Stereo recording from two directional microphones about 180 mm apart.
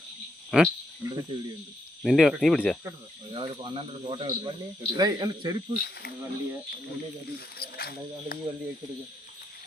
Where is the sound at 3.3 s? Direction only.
30° right (ahead or behind).